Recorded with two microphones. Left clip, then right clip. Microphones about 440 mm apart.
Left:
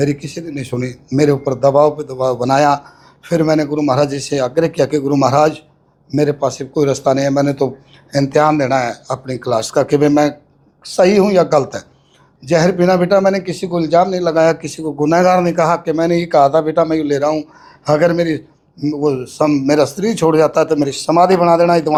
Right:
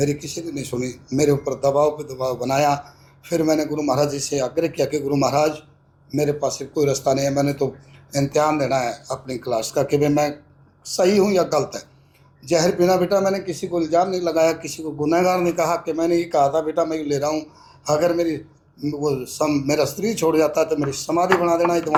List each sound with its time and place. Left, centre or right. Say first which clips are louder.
0.0 s a man's voice: left 5 dB; left